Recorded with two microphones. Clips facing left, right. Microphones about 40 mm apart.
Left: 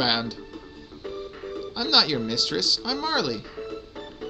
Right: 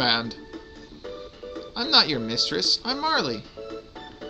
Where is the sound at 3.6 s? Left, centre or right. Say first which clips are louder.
Left 2 dB; left.